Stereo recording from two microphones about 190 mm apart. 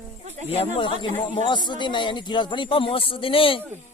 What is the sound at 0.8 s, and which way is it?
Speech, 25° left (ahead or behind).